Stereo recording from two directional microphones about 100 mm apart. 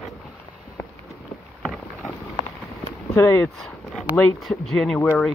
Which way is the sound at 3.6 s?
10° left (ahead or behind).